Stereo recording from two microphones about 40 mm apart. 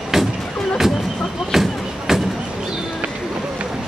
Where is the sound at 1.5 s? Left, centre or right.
Centre.